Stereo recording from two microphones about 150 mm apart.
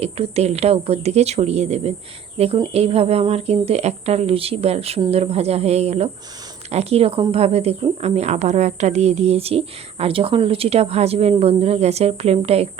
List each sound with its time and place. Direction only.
0.0 s speech: 45° right (ahead or behind)